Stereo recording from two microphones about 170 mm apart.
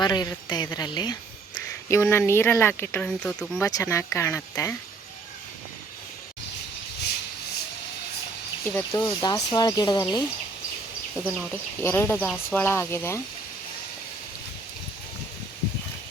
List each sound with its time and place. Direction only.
0.0 s speech: 25° left (ahead or behind); by 3.6 s 5° left (ahead or behind)
3.6 s speech: 20° left (ahead or behind)
8.6 s speech: 15° left (ahead or behind)
11.2 s speech: 10° left (ahead or behind)